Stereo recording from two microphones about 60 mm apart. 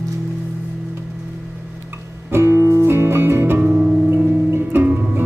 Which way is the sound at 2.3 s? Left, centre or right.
Right.